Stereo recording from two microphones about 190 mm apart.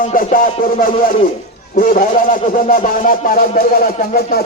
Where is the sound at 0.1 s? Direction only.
45° left (ahead or behind).